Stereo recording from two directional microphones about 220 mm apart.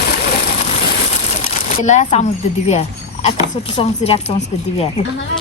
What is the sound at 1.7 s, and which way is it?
Speech, 30° left (ahead or behind).